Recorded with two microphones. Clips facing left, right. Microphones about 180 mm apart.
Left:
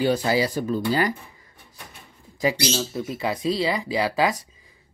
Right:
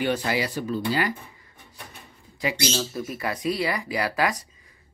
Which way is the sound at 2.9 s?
20° left (ahead or behind).